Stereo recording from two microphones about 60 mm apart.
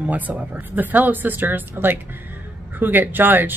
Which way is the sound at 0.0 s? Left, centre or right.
Right.